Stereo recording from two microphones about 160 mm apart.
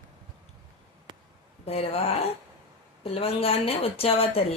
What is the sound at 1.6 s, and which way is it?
Speech, 40° left (ahead or behind).